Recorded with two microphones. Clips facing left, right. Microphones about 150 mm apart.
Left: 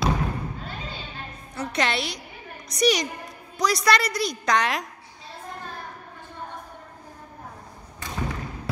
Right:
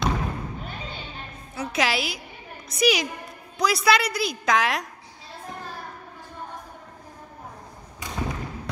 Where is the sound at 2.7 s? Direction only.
Centre (ahead or behind).